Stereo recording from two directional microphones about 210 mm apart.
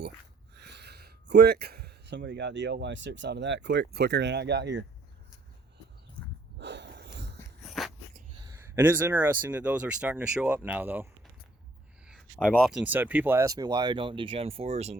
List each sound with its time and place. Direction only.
0.5 s speech: 50° right (ahead or behind)
6.6 s wheeze: 55° right (ahead or behind)
7.6 s a sound: centre (ahead or behind)
8.7 s speech: 10° right (ahead or behind); by 14.9 s 30° right (ahead or behind)